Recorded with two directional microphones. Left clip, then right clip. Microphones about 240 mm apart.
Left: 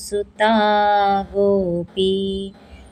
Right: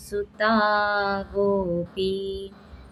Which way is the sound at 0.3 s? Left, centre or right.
Left.